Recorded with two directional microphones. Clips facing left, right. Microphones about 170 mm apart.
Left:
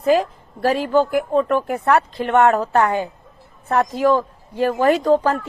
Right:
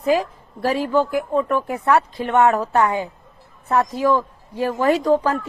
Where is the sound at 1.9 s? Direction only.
60° left (ahead or behind).